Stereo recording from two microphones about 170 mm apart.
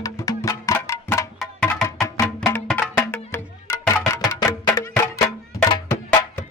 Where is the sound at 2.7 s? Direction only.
10° left (ahead or behind).